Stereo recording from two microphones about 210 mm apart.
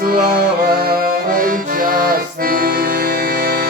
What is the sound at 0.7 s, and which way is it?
Accordion, 45° right (ahead or behind).